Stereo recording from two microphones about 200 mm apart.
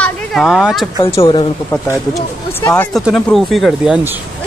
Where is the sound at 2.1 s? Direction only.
15° left (ahead or behind).